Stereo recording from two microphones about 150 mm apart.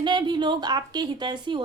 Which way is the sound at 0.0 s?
30° right (ahead or behind).